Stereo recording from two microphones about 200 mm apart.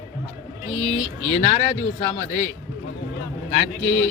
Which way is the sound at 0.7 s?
90° left.